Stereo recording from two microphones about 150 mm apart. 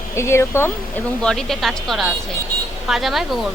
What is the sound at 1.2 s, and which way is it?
Speech, 5° left (ahead or behind).